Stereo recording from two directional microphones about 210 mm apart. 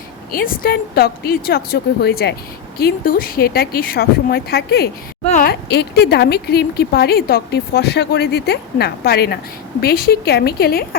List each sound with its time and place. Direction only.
0.3 s speech: 45° left (ahead or behind)
5.2 s speech: 40° left (ahead or behind)